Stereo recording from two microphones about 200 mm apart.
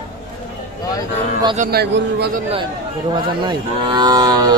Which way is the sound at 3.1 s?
20° right (ahead or behind).